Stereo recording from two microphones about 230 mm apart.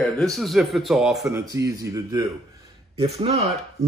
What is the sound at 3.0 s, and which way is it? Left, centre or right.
Speech, right.